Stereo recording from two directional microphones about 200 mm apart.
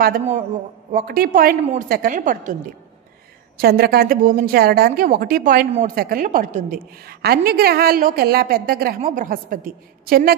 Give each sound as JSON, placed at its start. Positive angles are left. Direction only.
{"t": 0.0, "sound": "a woman's voice", "side_deg": -45}
{"t": 1.6, "sound": "a woman's voice", "side_deg": -35}
{"t": 1.9, "sound": "a woman's voice", "side_deg": -45}
{"t": 3.5, "sound": "a woman's voice", "side_deg": -50}